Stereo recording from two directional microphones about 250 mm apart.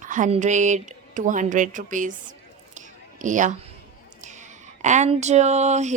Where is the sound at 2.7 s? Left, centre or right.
Right.